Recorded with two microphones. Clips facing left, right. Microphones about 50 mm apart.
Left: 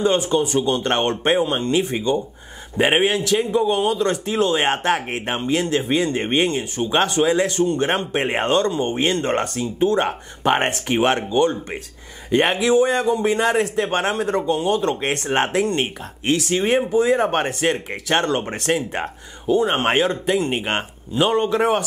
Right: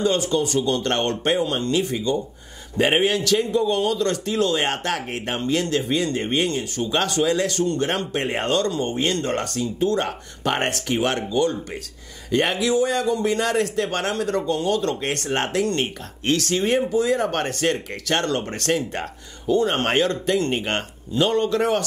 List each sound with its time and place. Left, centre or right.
0.0 s speech: left